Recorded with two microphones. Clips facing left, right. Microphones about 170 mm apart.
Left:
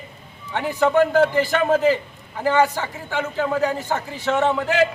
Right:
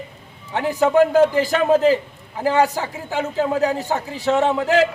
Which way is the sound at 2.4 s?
35° right (ahead or behind).